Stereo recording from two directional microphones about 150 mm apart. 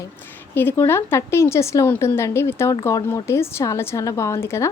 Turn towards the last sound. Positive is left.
turn(degrees=15)  # may be behind; listen again after turning